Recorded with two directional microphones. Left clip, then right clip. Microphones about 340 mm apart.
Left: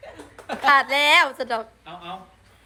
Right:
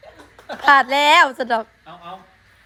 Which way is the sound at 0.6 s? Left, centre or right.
Centre.